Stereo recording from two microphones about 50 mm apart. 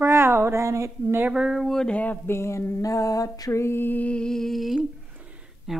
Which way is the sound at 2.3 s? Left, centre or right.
Left.